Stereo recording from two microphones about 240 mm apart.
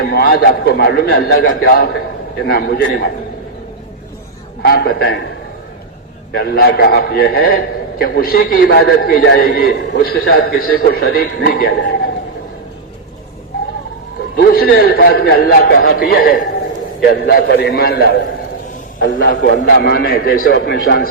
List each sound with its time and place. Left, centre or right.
0.0 s a man's voice: left
4.6 s a man's voice: left
6.3 s a man's voice: left
14.3 s a man's voice: left